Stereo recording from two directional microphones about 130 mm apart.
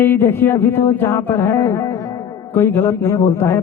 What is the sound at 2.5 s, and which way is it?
Speech, 20° left (ahead or behind).